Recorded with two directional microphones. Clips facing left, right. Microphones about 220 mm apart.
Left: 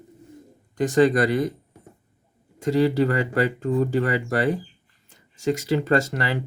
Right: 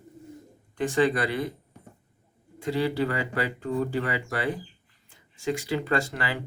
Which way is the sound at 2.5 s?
45° left (ahead or behind).